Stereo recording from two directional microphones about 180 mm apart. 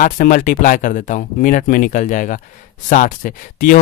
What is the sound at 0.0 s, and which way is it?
Speech, 50° left (ahead or behind).